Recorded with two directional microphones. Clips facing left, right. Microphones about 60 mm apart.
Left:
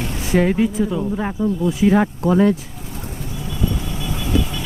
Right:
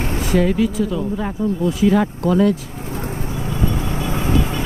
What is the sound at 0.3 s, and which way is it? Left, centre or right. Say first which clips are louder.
Speech: left 1 dB; left.